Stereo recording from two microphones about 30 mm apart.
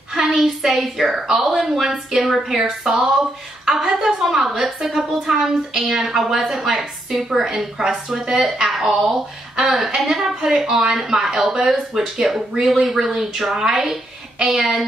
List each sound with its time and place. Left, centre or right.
0.1 s a sound: centre
0.7 s a woman's voice: centre
7.1 s a woman's voice: centre
8.7 s a woman's voice: centre